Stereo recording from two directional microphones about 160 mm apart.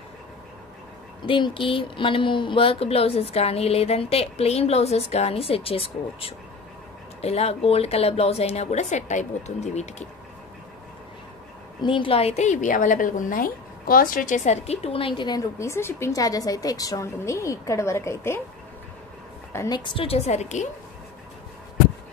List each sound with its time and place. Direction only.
1.2 s speech: 30° left (ahead or behind)
11.8 s a woman's voice: 30° left (ahead or behind); by 18.4 s 15° left (ahead or behind)
19.5 s a woman's voice: 20° left (ahead or behind)
19.8 s speech: 35° left (ahead or behind)